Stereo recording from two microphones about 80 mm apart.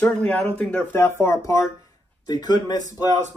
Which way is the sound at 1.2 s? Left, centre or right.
Left.